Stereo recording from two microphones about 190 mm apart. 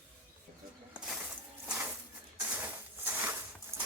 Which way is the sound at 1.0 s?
5° right (ahead or behind).